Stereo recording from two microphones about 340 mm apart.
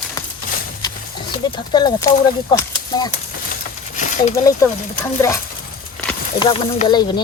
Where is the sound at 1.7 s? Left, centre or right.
Centre.